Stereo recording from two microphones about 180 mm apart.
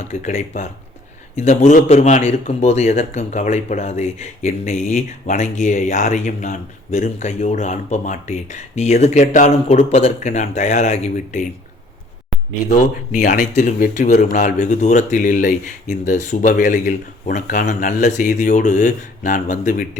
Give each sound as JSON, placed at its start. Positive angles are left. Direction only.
{"t": 0.1, "sound": "speech", "side_deg": 45}
{"t": 13.1, "sound": "speech", "side_deg": 45}